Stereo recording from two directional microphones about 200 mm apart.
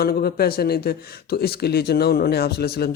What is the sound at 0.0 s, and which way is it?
Speech, 50° left (ahead or behind).